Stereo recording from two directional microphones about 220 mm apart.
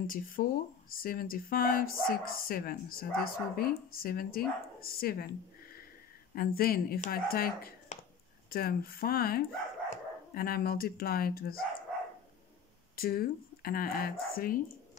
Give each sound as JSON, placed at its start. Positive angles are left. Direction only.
{"t": 0.0, "sound": "speech", "side_deg": 40}
{"t": 4.7, "sound": "a sound", "side_deg": 45}
{"t": 6.3, "sound": "speech", "side_deg": 40}
{"t": 12.9, "sound": "speech", "side_deg": 45}